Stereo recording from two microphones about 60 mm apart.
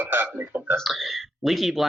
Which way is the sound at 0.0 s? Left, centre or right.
Right.